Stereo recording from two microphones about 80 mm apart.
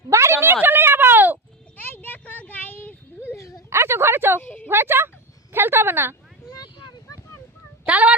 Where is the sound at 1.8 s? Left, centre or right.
Left.